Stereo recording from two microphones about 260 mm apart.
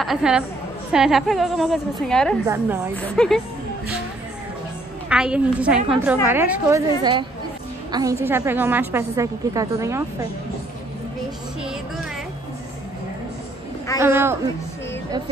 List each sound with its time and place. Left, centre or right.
0.0 s a woman's voice: centre
2.4 s a woman's voice: centre
3.0 s a woman's voice: centre
5.1 s a woman's voice: centre
7.0 s a woman's voice: centre
13.9 s a woman's voice: centre